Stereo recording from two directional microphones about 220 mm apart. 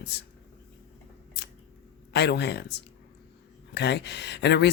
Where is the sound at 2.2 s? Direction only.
50° left (ahead or behind).